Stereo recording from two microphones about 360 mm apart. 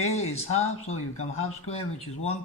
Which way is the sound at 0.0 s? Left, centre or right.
Centre.